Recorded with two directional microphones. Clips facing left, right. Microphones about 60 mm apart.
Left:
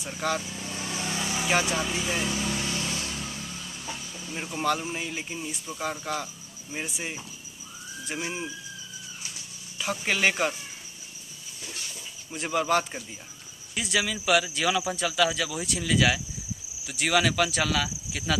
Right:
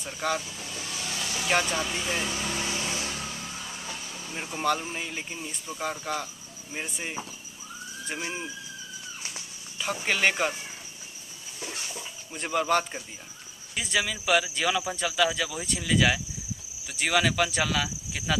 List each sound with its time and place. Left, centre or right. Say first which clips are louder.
0.0 s speech: even; centre
0.7 s vehicle: left 3 dB; left
1.5 s vehicle: even; centre; by 3.6 s right
4.3 s speech: even; centre
10.0 s speech: even; centre
11.6 s a sound: right 4 dB; right
12.3 s speech: even; centre